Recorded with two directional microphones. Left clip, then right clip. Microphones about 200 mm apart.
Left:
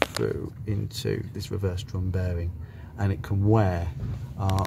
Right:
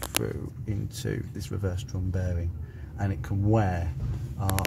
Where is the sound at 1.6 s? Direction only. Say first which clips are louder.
Left 1 dB; 30° left (ahead or behind).